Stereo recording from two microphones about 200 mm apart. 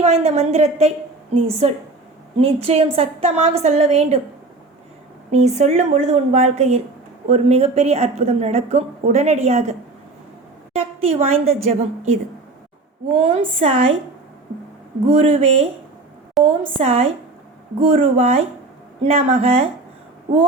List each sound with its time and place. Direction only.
0.0 s a woman's voice: 35° right (ahead or behind)
5.3 s a woman's voice: 35° right (ahead or behind)
10.8 s a woman's voice: 30° right (ahead or behind)
13.1 s a woman's voice: 25° right (ahead or behind)
15.1 s a woman's voice: 30° right (ahead or behind)